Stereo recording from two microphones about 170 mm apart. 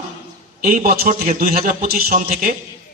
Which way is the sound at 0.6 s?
50° right (ahead or behind).